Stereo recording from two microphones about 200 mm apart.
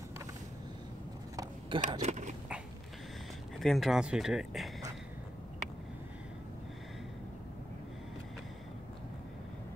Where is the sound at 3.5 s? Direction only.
Centre (ahead or behind).